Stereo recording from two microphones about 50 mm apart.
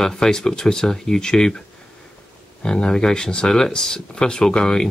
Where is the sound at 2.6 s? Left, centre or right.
Centre.